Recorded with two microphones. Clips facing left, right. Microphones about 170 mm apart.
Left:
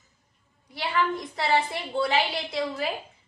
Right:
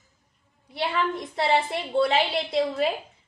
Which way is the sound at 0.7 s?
25° right (ahead or behind).